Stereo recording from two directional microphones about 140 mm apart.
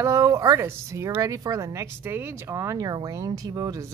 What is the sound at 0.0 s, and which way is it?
Speech, 25° right (ahead or behind).